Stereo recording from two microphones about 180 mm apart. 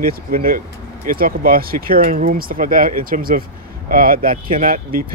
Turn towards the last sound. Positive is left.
turn(degrees=-50)  # may be behind; listen again after turning